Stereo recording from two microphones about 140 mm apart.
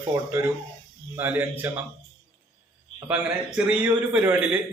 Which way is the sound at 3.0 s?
10° right (ahead or behind).